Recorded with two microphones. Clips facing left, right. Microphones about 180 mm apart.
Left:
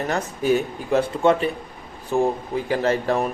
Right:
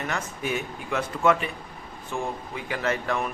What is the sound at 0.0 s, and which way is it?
Speech, 35° left (ahead or behind).